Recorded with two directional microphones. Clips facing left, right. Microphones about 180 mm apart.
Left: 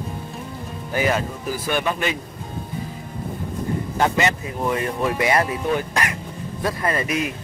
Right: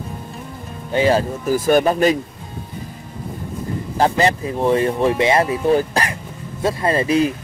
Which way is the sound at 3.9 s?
35° right (ahead or behind).